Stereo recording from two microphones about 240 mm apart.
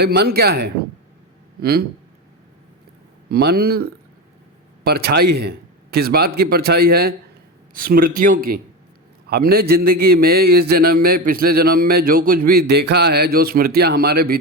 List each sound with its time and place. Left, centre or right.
0.0 s a man's voice: right
3.2 s a man's voice: right